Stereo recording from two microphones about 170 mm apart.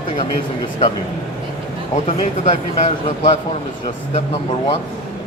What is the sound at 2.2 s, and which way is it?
Speech, 40° left (ahead or behind).